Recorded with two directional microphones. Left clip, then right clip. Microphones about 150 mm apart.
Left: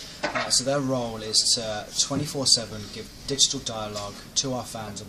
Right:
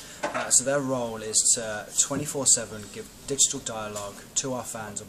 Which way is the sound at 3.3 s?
35° right (ahead or behind).